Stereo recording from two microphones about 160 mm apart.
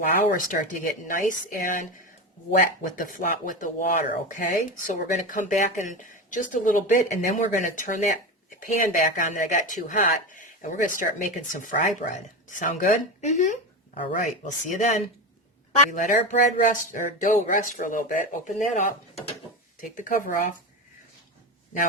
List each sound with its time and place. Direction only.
0.1 s speech: 60° left (ahead or behind)